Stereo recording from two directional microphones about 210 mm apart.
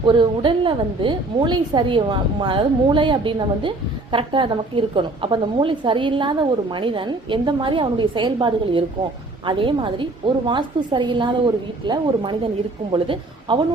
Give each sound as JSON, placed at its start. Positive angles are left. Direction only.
{"t": 0.0, "sound": "a woman's voice", "side_deg": -25}